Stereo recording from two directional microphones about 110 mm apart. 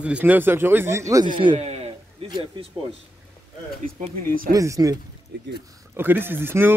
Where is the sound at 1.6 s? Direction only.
85° right.